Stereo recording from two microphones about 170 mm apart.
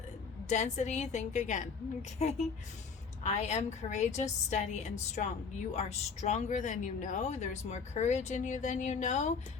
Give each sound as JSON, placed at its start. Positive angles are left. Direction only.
{"t": 0.4, "sound": "a woman's voice", "side_deg": 45}